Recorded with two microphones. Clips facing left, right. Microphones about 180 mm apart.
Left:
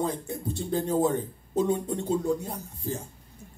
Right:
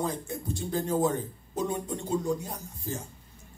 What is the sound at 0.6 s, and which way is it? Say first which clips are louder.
Speech: left 2 dB; 25° left (ahead or behind).